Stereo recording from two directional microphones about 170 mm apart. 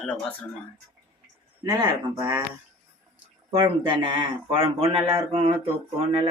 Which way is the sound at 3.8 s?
25° right (ahead or behind).